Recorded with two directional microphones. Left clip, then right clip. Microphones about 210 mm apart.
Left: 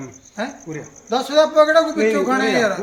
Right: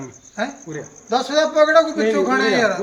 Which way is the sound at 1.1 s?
Centre (ahead or behind).